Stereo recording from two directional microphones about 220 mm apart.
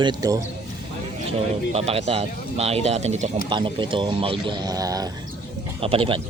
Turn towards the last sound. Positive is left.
turn(degrees=-25)  # may be behind; listen again after turning